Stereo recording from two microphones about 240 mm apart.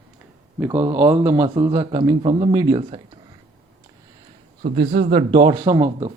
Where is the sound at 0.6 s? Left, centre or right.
Centre.